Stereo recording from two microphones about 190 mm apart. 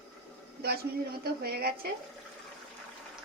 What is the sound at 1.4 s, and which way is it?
Speech, 55° right (ahead or behind).